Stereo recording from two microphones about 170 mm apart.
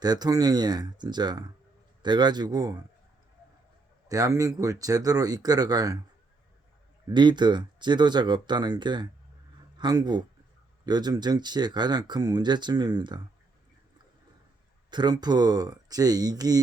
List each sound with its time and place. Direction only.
0.0 s speech: 25° right (ahead or behind)
4.1 s speech: 20° right (ahead or behind)
7.1 s speech: 25° right (ahead or behind)
14.8 s speech: 25° right (ahead or behind)